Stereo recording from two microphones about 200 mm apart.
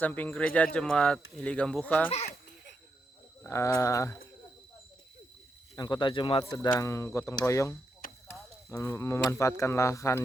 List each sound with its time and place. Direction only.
0.0 s speech: 10° left (ahead or behind)
3.4 s speech: 15° left (ahead or behind)
5.7 s speech: 20° left (ahead or behind)
8.0 s a sound: 45° left (ahead or behind)
8.7 s speech: 15° left (ahead or behind)